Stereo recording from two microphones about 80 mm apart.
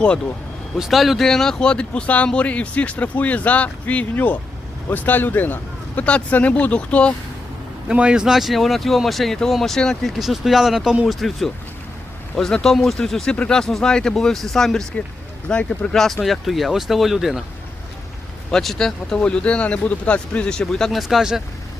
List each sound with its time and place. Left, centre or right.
0.8 s speech: centre
7.9 s speech: centre
13.3 s speech: centre
13.6 s speech: centre
18.5 s speech: centre